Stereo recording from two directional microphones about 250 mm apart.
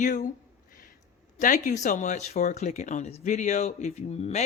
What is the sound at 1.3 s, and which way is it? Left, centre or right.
Speech, left.